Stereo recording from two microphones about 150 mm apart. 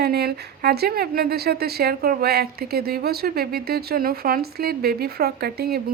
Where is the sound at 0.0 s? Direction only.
90° right.